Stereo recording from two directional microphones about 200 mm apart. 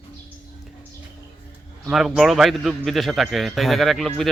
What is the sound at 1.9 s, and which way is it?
A man's voice, centre (ahead or behind).